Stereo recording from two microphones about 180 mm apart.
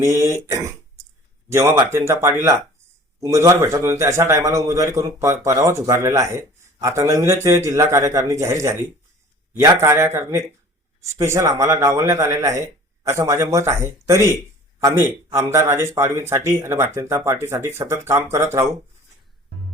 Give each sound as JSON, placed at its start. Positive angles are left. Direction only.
{"t": 0.0, "sound": "a man's voice", "side_deg": -15}